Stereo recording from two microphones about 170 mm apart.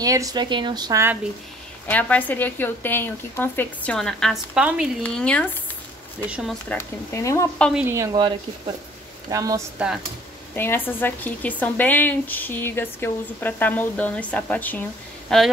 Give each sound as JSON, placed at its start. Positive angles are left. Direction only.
{"t": 0.0, "sound": "speech", "side_deg": -20}
{"t": 1.9, "sound": "a woman's voice", "side_deg": 10}
{"t": 5.0, "sound": "a woman's voice", "side_deg": 5}
{"t": 6.7, "sound": "a woman's voice", "side_deg": 15}
{"t": 7.7, "sound": "speech", "side_deg": -15}
{"t": 9.3, "sound": "speech", "side_deg": -20}
{"t": 9.8, "sound": "speech", "side_deg": -10}
{"t": 10.5, "sound": "a woman's voice", "side_deg": 15}